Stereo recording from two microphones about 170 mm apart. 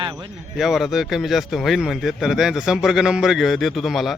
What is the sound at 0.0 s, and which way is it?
Speech, 30° right (ahead or behind).